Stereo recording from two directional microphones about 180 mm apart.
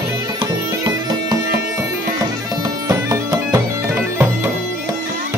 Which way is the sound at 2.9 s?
15° right (ahead or behind).